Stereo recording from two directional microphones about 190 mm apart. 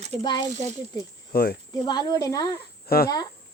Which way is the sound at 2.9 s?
55° left (ahead or behind).